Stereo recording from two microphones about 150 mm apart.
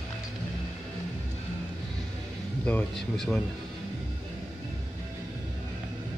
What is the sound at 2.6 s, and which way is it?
Speech, 5° left (ahead or behind).